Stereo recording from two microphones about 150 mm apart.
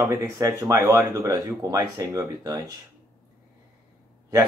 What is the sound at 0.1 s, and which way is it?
Speech, 20° right (ahead or behind).